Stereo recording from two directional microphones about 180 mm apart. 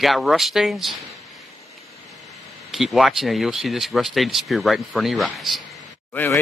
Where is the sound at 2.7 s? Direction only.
Centre (ahead or behind).